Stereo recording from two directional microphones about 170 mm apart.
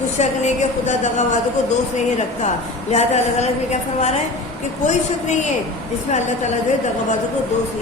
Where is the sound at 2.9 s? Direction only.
40° left (ahead or behind).